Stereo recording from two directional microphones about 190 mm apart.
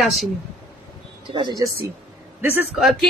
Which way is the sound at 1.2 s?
25° right (ahead or behind).